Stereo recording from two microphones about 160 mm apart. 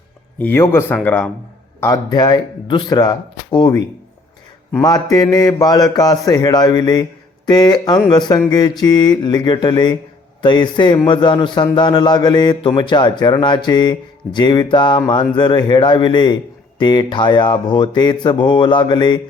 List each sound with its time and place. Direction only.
0.3 s speech: 15° left (ahead or behind)
1.8 s speech: 25° left (ahead or behind)